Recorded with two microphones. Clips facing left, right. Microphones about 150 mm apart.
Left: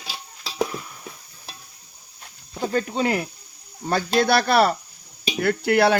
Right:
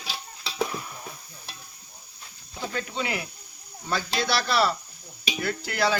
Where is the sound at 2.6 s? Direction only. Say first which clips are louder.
Left 8 dB; 45° left (ahead or behind).